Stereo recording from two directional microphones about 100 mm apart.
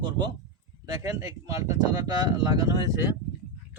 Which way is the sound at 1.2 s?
35° right (ahead or behind).